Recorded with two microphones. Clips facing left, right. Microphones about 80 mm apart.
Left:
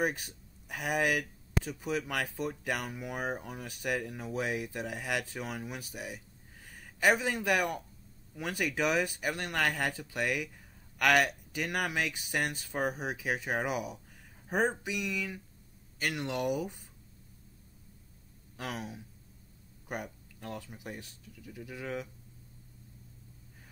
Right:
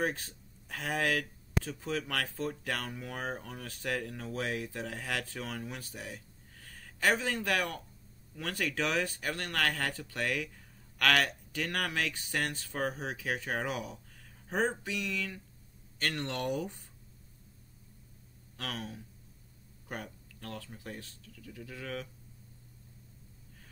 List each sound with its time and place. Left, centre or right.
0.0 s speech: centre
18.6 s speech: centre